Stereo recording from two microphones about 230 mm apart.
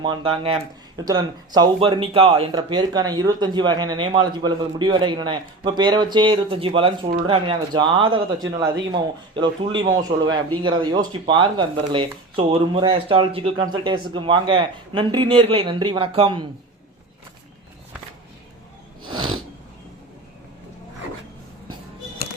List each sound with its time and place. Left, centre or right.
0.0 s speech: right
19.0 s snort: centre